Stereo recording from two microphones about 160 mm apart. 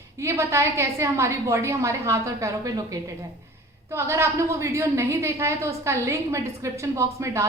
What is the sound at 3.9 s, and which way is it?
A woman's voice, 15° right (ahead or behind).